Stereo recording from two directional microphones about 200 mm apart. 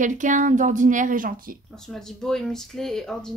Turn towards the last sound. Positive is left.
turn(degrees=0)  # may be behind; listen again after turning